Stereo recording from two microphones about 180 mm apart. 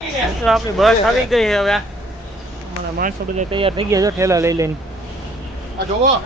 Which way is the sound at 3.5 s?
30° right (ahead or behind).